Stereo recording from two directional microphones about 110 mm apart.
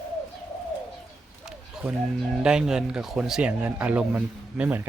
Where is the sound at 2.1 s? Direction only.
5° right (ahead or behind).